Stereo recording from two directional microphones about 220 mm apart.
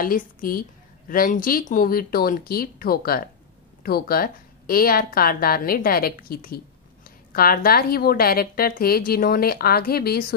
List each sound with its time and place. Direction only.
0.0 s a woman's voice: 40° left (ahead or behind)